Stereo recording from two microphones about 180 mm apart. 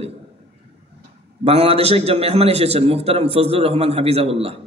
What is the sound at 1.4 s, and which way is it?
Speech, 35° right (ahead or behind).